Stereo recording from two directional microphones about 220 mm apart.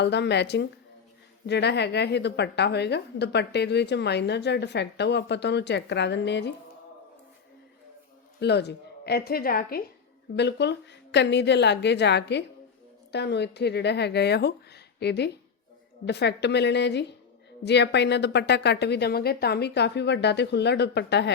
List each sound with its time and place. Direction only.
0.0 s speech: 50° left (ahead or behind)
8.4 s speech: 50° left (ahead or behind)